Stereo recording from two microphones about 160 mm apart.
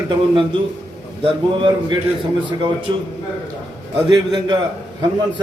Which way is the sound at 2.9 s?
25° right (ahead or behind).